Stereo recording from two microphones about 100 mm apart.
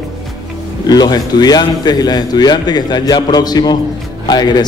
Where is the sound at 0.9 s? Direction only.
40° left (ahead or behind).